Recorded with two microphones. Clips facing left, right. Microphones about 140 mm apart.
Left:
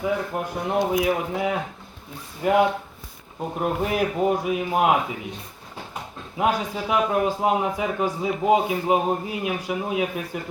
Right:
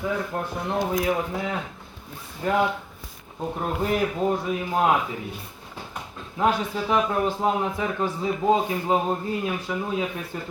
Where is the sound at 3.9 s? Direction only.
10° left (ahead or behind).